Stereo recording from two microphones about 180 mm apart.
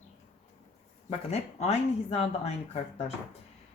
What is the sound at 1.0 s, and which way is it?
Speech, 35° left (ahead or behind).